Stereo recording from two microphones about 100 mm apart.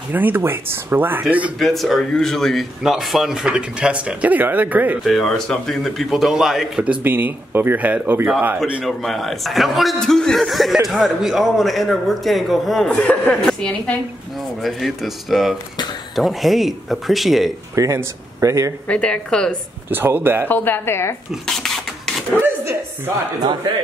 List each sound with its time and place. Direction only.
0.1 s speech: 20° right (ahead or behind)
1.6 s speech: centre (ahead or behind); by 4.9 s 15° right (ahead or behind)
5.0 s speech: centre (ahead or behind)
6.8 s speech: 15° right (ahead or behind)
8.8 s speech: centre (ahead or behind)
12.9 s a woman's voice: 15° left (ahead or behind)
17.7 s speech: 35° right (ahead or behind)
18.9 s a woman's voice: 10° left (ahead or behind)
19.9 s speech: 20° right (ahead or behind)
20.4 s a woman's voice: 20° left (ahead or behind)
21.5 s printer: 5° left (ahead or behind)
22.4 s a sound: 20° right (ahead or behind)
23.4 s speech: 45° right (ahead or behind)